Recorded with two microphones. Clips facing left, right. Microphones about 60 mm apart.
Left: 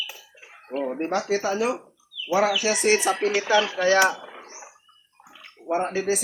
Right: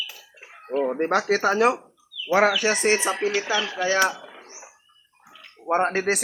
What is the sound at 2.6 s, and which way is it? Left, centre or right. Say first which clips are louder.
Music: even; right.